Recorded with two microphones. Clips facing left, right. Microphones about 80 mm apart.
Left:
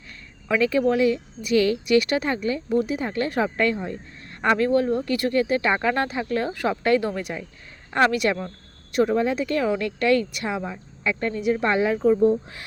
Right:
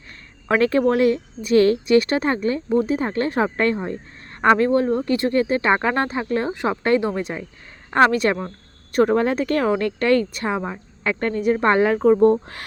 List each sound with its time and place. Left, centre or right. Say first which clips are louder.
0.4 s speech: right 3 dB; right
8.9 s speech: right 3 dB; right
11.0 s speech: right 3 dB; right